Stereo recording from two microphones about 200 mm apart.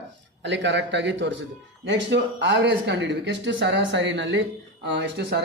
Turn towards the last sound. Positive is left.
turn(degrees=-55)  # may be behind; listen again after turning